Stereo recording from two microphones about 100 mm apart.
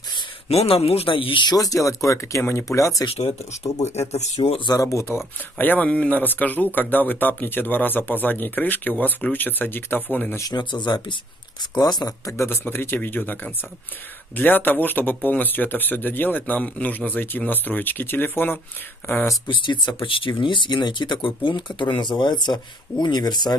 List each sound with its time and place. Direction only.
0.5 s speech: 90° left; by 2.9 s 30° left (ahead or behind)
3.1 s speech: 85° left
4.6 s speech: 35° left (ahead or behind)
5.0 s speech: 20° left (ahead or behind)
10.5 s speech: 50° left (ahead or behind)
12.4 s speech: 20° left (ahead or behind)
19.4 s speech: 50° left (ahead or behind)